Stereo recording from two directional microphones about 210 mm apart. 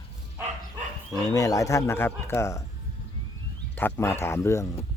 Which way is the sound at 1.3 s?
15° left (ahead or behind).